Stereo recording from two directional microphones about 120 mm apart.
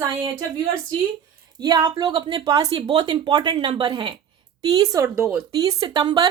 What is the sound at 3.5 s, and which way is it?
Speech, 50° right (ahead or behind).